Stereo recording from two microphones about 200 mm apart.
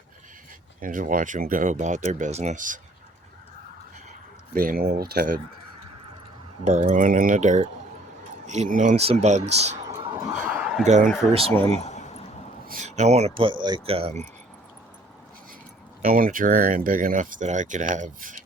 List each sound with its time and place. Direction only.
0.8 s speech: 45° right (ahead or behind)
4.5 s speech: 45° right (ahead or behind)
6.7 s speech: 35° right (ahead or behind)
10.3 s a sound: 10° right (ahead or behind)
10.8 s speech: 35° right (ahead or behind)
11.8 s a sound: 35° left (ahead or behind)
12.6 s speech: 40° right (ahead or behind)
16.0 s speech: 45° right (ahead or behind)